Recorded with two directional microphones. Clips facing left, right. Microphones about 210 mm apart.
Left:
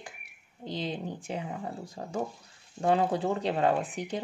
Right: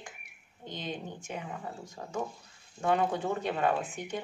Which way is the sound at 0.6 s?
35° left (ahead or behind).